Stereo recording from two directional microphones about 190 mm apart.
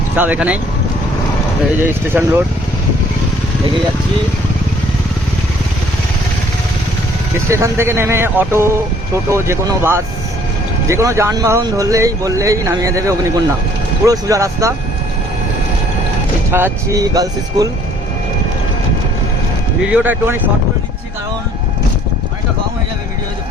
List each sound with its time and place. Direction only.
0.2 s speech: 10° right (ahead or behind)
1.8 s speech: 10° right (ahead or behind)
7.3 s speech: 15° right (ahead or behind)
16.5 s speech: 10° right (ahead or behind)
19.8 s speech: 5° right (ahead or behind)